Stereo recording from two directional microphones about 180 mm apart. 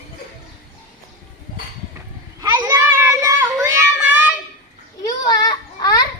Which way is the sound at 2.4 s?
15° right (ahead or behind).